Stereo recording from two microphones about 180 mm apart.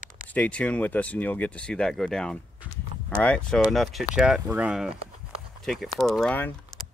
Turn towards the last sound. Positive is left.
turn(degrees=5)  # may be behind; listen again after turning